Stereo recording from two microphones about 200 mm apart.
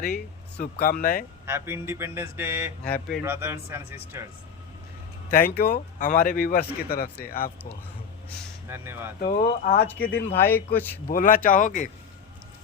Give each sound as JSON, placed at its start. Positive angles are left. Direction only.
{"t": 0.0, "sound": "a man's voice", "side_deg": 50}
{"t": 1.5, "sound": "speech", "side_deg": -10}
{"t": 5.3, "sound": "a man's voice", "side_deg": 45}
{"t": 8.7, "sound": "speech", "side_deg": -10}
{"t": 9.2, "sound": "a man's voice", "side_deg": 45}
{"t": 9.8, "sound": "speech", "side_deg": 10}
{"t": 11.1, "sound": "a man's voice", "side_deg": 45}